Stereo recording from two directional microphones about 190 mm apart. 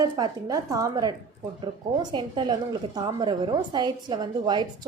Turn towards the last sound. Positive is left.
turn(degrees=-25)  # may be behind; listen again after turning